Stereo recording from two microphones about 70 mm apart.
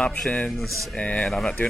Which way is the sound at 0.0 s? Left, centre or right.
Centre.